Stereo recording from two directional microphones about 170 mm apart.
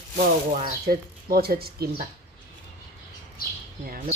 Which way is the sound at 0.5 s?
55° right (ahead or behind).